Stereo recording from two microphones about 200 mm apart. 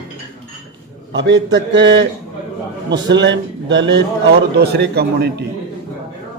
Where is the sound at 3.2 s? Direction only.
65° right (ahead or behind).